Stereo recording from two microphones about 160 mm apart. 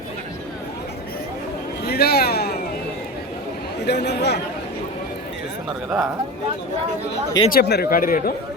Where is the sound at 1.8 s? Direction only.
80° left.